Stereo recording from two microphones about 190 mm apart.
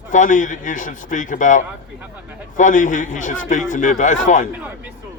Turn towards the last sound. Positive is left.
turn(degrees=40)  # may be behind; listen again after turning